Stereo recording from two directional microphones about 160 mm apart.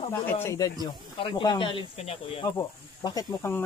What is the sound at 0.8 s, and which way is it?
Speech, 30° left (ahead or behind).